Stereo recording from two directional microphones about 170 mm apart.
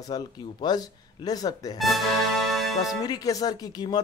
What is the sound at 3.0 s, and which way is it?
Speech, 20° left (ahead or behind).